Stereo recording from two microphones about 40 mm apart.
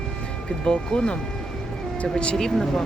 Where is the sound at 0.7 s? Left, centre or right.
Left.